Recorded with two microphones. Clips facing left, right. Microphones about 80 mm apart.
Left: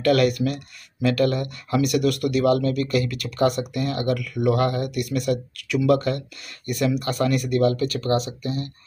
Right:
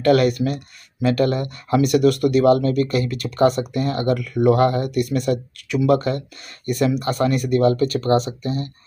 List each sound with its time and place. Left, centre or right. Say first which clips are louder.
0.0 s speech: right 3 dB; right